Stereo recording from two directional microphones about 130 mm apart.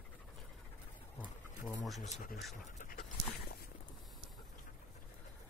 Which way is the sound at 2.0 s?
75° left (ahead or behind).